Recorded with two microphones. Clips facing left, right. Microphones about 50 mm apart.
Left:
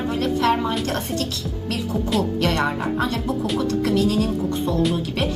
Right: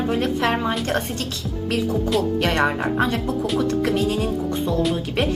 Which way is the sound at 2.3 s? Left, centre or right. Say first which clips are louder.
Right 1 dB; right.